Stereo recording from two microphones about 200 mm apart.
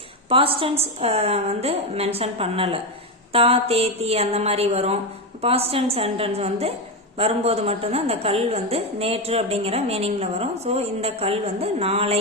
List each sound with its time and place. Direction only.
0.3 s a woman's voice: 25° right (ahead or behind)